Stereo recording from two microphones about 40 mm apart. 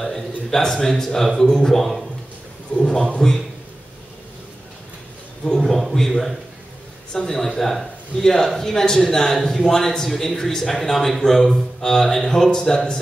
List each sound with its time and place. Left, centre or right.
0.5 s a man's voice: centre
2.7 s a man's voice: centre
5.6 s a sound: centre
7.2 s a man's voice: centre